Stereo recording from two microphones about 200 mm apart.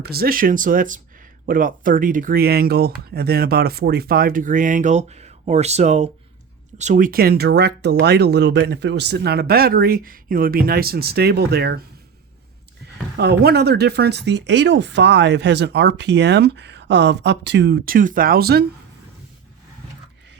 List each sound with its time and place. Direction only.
0.0 s speech: 50° right (ahead or behind)
13.1 s speech: 55° right (ahead or behind)